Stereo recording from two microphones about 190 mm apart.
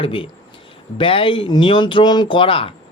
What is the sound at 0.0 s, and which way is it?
Speech, 30° left (ahead or behind).